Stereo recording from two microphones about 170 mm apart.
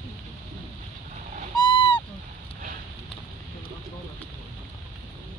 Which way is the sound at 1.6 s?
30° left (ahead or behind).